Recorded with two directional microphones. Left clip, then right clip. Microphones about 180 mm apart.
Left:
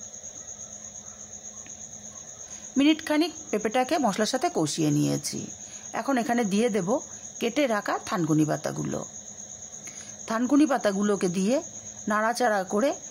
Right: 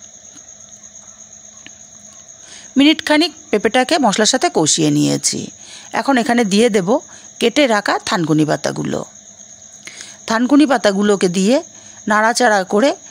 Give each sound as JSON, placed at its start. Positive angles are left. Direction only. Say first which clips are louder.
{"t": 2.7, "sound": "speech", "louder": "right 11 dB", "side_deg": -40}